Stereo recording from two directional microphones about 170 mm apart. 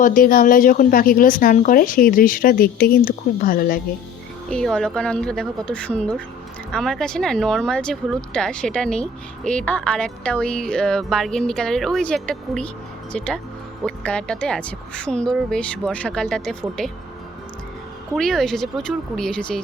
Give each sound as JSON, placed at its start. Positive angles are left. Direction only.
{"t": 0.0, "sound": "a woman's voice", "side_deg": 55}
{"t": 4.4, "sound": "speech", "side_deg": 5}
{"t": 18.1, "sound": "speech", "side_deg": 0}